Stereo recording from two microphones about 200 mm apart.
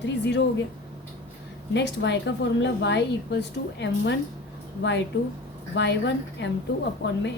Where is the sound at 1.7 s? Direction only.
60° left (ahead or behind).